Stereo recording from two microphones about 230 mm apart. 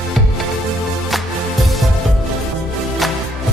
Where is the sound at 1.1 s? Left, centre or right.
Centre.